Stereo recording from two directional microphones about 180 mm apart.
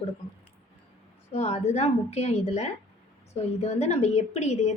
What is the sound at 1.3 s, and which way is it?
A woman's voice, 35° left (ahead or behind).